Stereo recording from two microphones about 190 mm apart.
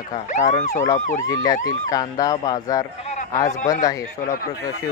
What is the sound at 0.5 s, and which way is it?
Speech, 40° left (ahead or behind).